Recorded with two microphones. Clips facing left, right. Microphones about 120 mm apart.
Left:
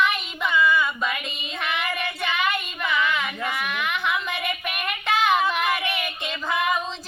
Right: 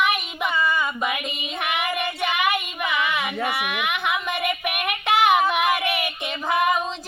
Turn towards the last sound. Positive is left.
turn(degrees=-10)  # may be behind; listen again after turning